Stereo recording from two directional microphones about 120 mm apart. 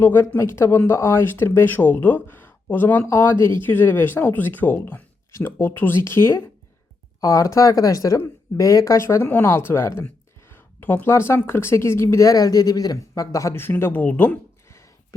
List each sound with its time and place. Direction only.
0.0 s speech: 15° left (ahead or behind)